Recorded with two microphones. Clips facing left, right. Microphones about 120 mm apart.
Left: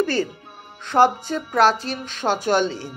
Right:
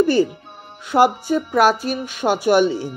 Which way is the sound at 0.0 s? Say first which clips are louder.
Right 6 dB; 15° right (ahead or behind).